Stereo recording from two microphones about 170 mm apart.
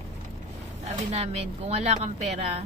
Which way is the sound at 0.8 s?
40° right (ahead or behind).